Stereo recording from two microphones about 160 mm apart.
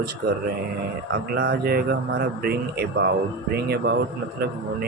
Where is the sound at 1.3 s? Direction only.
80° right.